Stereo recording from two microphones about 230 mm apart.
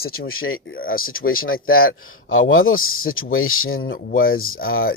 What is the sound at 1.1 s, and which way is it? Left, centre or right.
Speech, left.